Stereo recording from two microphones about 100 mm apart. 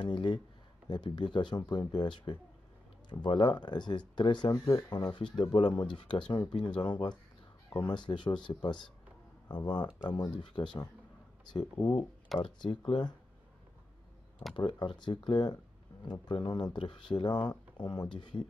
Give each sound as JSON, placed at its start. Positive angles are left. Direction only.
{"t": 0.0, "sound": "speech", "side_deg": 55}
{"t": 11.8, "sound": "speech", "side_deg": 70}
{"t": 12.3, "sound": "speech", "side_deg": 0}
{"t": 12.6, "sound": "speech", "side_deg": 55}
{"t": 14.5, "sound": "speech", "side_deg": 50}